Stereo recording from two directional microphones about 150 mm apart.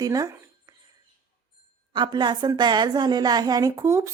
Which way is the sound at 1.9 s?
30° right (ahead or behind).